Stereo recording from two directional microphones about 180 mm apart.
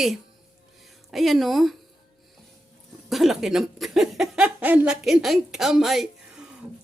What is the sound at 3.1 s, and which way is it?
Speech, centre (ahead or behind).